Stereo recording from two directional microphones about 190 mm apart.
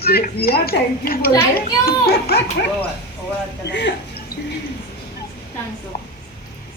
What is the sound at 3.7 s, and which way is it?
Speech, 65° left (ahead or behind).